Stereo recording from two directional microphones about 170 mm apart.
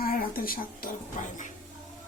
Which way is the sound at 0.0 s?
60° left (ahead or behind).